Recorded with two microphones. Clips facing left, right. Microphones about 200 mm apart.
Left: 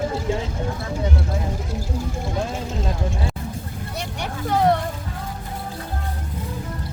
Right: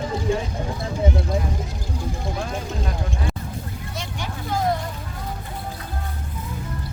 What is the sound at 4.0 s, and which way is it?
Vehicle, 65° left (ahead or behind).